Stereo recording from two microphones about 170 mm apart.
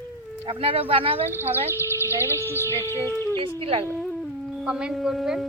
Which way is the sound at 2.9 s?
15° right (ahead or behind).